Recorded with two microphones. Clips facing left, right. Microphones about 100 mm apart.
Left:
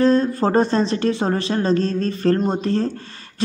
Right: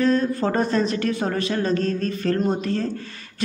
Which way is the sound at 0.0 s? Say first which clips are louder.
Left 4 dB; 30° left (ahead or behind).